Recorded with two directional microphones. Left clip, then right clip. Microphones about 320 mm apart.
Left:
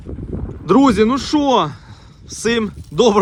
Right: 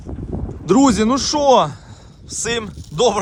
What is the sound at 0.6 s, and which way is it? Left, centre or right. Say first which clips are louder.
Speech: left 2 dB; centre.